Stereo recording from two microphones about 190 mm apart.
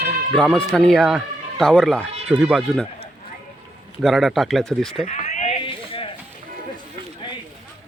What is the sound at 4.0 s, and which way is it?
Speech, centre (ahead or behind).